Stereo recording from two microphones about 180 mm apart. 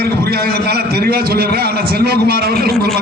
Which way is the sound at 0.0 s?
60° right (ahead or behind).